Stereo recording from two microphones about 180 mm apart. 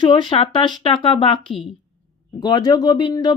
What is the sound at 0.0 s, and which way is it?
Speech, 25° left (ahead or behind).